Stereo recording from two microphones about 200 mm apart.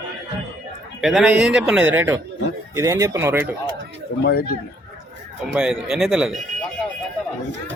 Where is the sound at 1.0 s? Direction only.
Centre (ahead or behind).